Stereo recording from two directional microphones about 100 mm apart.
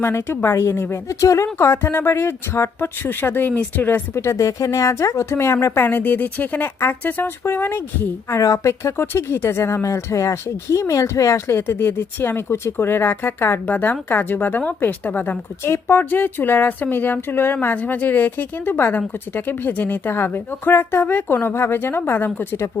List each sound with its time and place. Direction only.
0.0 s speech: 25° left (ahead or behind)